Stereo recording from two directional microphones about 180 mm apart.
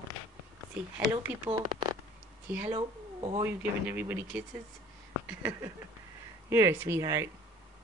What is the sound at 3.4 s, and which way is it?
Speech, 10° right (ahead or behind).